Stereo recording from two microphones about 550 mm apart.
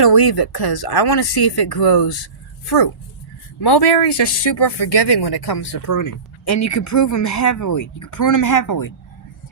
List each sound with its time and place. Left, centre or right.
0.0 s speech: left